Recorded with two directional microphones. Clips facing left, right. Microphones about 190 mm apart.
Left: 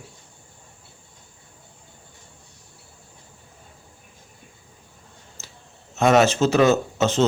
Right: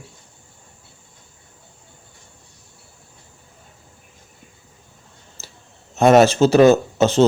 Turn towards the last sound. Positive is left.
turn(degrees=-35)  # may be behind; listen again after turning